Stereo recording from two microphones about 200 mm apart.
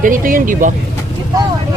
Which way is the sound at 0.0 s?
45° right (ahead or behind).